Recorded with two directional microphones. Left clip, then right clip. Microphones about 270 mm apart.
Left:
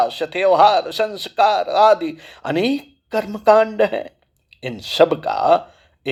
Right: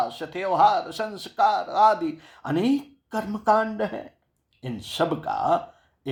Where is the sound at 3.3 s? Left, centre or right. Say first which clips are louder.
Left 8 dB; left.